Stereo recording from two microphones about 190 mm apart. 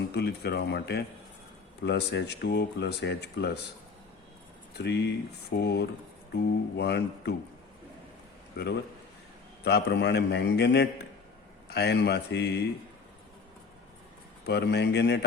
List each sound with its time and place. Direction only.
0.1 s speech: 60° left (ahead or behind)
4.8 s speech: 65° left (ahead or behind)
9.6 s speech: 60° left (ahead or behind)
14.4 s speech: 60° left (ahead or behind)